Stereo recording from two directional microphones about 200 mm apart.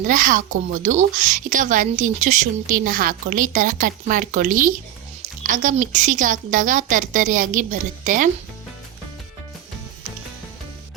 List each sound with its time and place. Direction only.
0.0 s a woman's voice: 40° right (ahead or behind)